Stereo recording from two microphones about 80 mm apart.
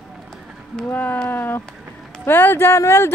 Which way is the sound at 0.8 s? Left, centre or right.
Left.